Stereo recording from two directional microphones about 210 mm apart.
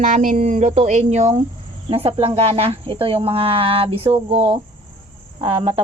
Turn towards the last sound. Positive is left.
turn(degrees=-25)  # may be behind; listen again after turning